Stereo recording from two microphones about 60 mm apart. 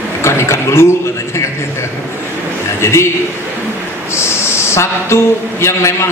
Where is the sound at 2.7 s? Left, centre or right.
Left.